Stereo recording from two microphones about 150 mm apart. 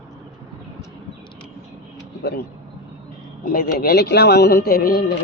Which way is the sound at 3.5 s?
90° left.